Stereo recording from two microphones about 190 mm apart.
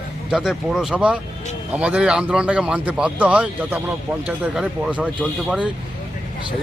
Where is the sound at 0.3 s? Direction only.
Centre (ahead or behind).